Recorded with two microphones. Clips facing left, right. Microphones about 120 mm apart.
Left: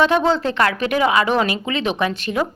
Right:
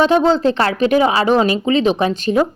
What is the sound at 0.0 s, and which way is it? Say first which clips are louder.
A woman's voice: right 4 dB; 30° right (ahead or behind).